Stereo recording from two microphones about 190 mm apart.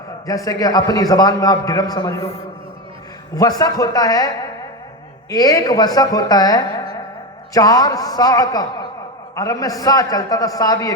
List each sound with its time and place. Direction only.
0.3 s a man's voice: 20° left (ahead or behind)
3.3 s a man's voice: 20° left (ahead or behind)
5.3 s a man's voice: 20° left (ahead or behind)